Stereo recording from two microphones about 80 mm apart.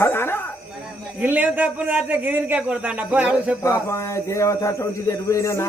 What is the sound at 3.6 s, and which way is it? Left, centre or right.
Speech, left.